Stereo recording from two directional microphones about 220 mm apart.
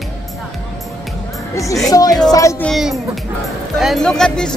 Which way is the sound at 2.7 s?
Centre (ahead or behind).